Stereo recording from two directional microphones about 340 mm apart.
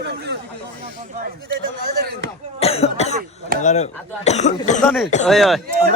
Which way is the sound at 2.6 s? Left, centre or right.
Centre.